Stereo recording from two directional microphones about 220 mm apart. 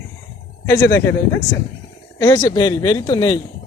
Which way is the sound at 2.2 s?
15° left (ahead or behind).